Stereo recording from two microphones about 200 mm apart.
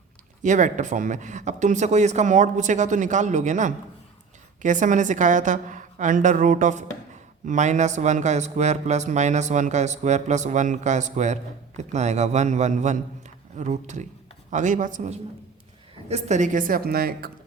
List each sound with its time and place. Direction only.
0.4 s a man's voice: 35° right (ahead or behind)